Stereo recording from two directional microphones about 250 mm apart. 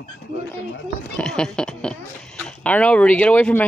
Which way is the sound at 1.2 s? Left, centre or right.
Centre.